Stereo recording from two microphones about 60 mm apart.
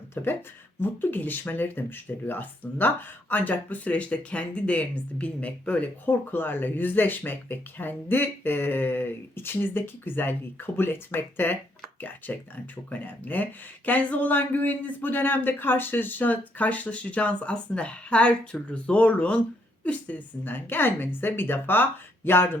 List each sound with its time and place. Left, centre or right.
0.1 s speech: left
6.1 s speech: left